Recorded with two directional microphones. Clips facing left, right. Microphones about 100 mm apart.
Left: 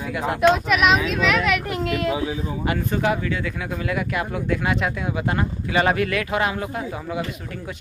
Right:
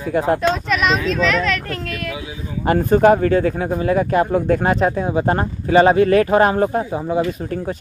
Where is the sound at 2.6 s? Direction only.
40° right (ahead or behind).